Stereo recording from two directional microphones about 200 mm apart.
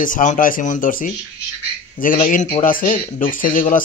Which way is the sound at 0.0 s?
40° left (ahead or behind).